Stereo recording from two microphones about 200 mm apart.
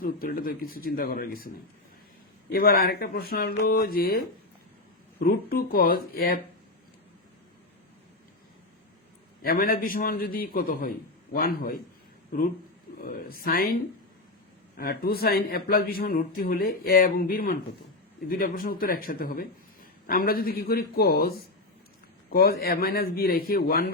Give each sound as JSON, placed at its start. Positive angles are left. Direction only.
{"t": 0.0, "sound": "a man's voice", "side_deg": 45}
{"t": 2.5, "sound": "a man's voice", "side_deg": 50}
{"t": 5.2, "sound": "a man's voice", "side_deg": 50}
{"t": 9.4, "sound": "a man's voice", "side_deg": 45}
{"t": 13.0, "sound": "a man's voice", "side_deg": 45}
{"t": 14.8, "sound": "a man's voice", "side_deg": 50}